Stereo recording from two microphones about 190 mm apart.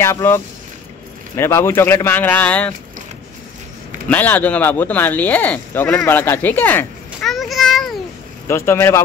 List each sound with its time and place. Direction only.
0.0 s speech: 15° left (ahead or behind)
4.1 s speech: 10° left (ahead or behind)
8.5 s speech: 15° left (ahead or behind)